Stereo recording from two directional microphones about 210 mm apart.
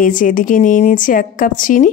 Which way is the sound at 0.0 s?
40° left (ahead or behind).